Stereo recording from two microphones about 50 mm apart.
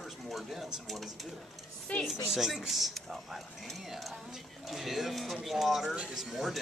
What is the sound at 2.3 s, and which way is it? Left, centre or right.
Speech, centre.